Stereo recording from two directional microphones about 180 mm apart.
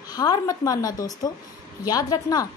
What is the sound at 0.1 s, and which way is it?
A woman's voice, 20° left (ahead or behind).